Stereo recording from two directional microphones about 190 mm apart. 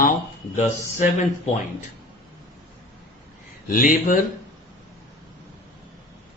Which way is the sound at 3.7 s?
45° left (ahead or behind).